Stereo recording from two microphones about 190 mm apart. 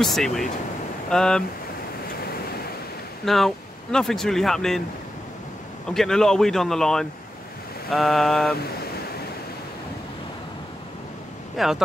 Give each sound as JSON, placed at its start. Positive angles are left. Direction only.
{"t": 0.0, "sound": "speech", "side_deg": 0}
{"t": 3.3, "sound": "speech", "side_deg": 0}
{"t": 5.9, "sound": "speech", "side_deg": 5}
{"t": 11.5, "sound": "speech", "side_deg": 0}